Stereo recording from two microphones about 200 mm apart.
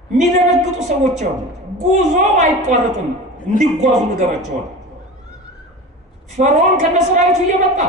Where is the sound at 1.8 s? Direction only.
35° right (ahead or behind).